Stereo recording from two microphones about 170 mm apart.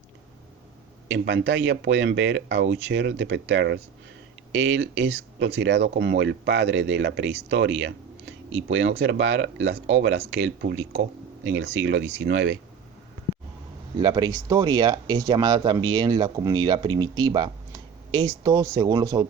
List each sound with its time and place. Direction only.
1.1 s speech: 90° right
11.5 s speech: 90° right
14.0 s speech: 25° right (ahead or behind)